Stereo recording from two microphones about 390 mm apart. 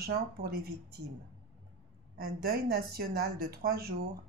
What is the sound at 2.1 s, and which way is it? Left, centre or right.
Speech, right.